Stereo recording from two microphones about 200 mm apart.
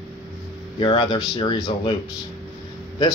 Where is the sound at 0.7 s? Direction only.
25° left (ahead or behind).